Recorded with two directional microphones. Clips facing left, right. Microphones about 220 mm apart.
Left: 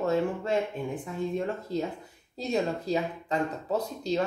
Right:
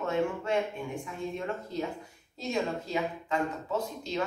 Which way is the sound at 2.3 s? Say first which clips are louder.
Left 3 dB; 35° left (ahead or behind).